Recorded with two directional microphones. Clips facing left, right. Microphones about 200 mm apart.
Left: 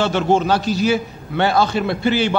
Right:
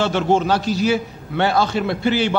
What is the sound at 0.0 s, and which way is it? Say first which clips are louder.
A man's voice: left 1 dB; 20° left (ahead or behind).